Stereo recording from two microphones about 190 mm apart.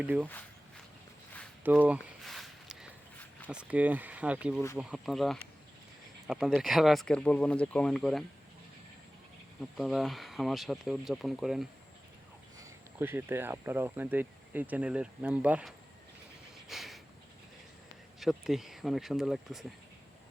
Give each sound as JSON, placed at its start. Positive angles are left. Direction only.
{"t": 0.0, "sound": "speech", "side_deg": -10}
{"t": 1.7, "sound": "a sound", "side_deg": -5}
{"t": 3.5, "sound": "speech", "side_deg": -5}
{"t": 9.6, "sound": "speech", "side_deg": 0}
{"t": 12.5, "sound": "speech", "side_deg": -15}
{"t": 16.6, "sound": "a sound", "side_deg": 0}
{"t": 18.2, "sound": "speech", "side_deg": 0}